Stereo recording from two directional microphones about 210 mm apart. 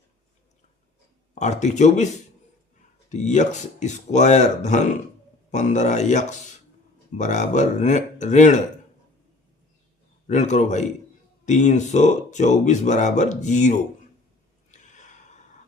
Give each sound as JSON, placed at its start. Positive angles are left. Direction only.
{"t": 1.4, "sound": "speech", "side_deg": 35}
{"t": 3.1, "sound": "speech", "side_deg": 35}
{"t": 10.2, "sound": "speech", "side_deg": 35}
{"t": 14.7, "sound": "a sound", "side_deg": 35}